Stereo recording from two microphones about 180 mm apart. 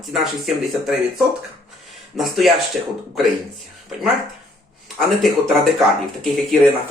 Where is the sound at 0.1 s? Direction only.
Centre (ahead or behind).